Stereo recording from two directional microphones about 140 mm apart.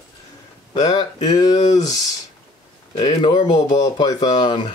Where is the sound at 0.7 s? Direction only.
30° left (ahead or behind).